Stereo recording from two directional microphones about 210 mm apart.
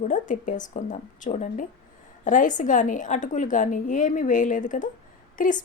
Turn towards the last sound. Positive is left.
turn(degrees=40)  # may be behind; listen again after turning